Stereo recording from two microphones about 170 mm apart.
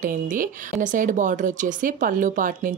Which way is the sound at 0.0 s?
50° right (ahead or behind).